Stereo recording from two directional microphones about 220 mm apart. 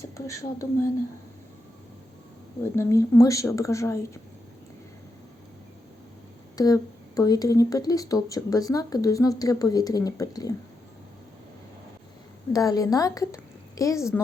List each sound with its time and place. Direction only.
0.0 s speech: 15° left (ahead or behind)
2.7 s speech: 15° left (ahead or behind)
6.6 s speech: 15° left (ahead or behind)
12.5 s a woman's voice: 15° left (ahead or behind)